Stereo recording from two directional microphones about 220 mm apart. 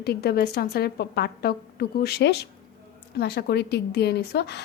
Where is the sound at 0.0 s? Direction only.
45° left (ahead or behind).